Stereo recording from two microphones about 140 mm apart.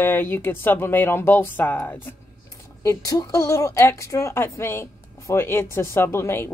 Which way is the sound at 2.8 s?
25° left (ahead or behind).